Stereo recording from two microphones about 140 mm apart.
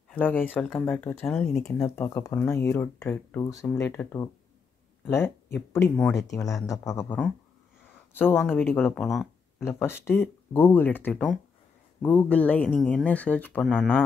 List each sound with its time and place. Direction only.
0.1 s speech: 15° left (ahead or behind)
2.0 s speech: 25° left (ahead or behind)
3.9 s speech: 15° left (ahead or behind)
9.0 s speech: centre (ahead or behind)
9.6 s speech: 15° left (ahead or behind)